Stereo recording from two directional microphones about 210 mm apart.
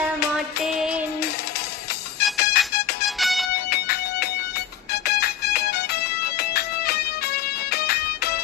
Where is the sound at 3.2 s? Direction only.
Centre (ahead or behind).